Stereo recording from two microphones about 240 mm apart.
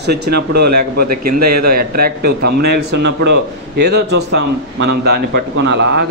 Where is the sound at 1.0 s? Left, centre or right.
Right.